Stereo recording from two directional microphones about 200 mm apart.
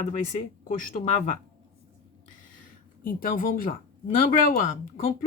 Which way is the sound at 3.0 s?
45° left (ahead or behind).